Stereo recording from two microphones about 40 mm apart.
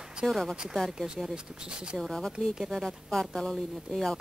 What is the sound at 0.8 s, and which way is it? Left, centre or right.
Speech, centre.